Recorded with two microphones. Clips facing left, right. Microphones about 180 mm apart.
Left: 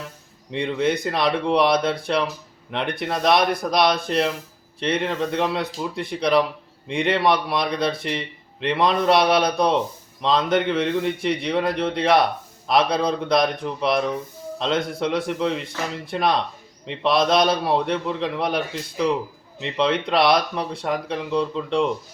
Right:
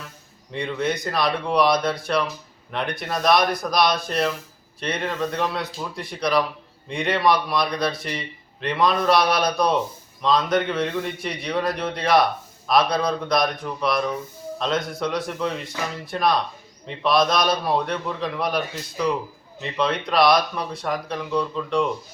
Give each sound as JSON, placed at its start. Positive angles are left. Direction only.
{"t": 0.5, "sound": "a man's voice", "side_deg": 25}